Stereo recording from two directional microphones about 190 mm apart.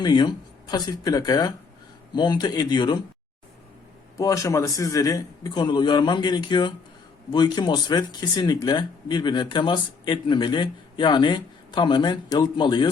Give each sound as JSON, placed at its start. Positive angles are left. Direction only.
{"t": 0.0, "sound": "speech", "side_deg": 20}
{"t": 4.2, "sound": "speech", "side_deg": 15}